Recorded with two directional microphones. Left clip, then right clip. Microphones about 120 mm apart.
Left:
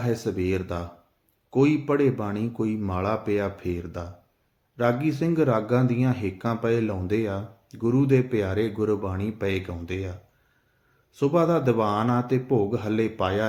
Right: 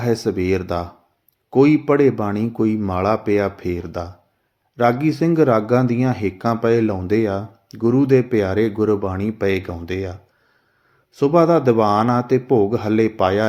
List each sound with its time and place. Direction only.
0.0 s speech: 30° right (ahead or behind)